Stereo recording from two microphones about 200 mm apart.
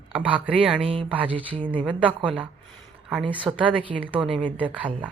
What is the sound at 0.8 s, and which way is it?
Speech, 30° right (ahead or behind).